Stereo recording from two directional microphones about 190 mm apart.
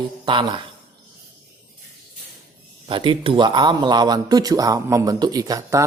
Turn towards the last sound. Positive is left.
turn(degrees=-15)  # may be behind; listen again after turning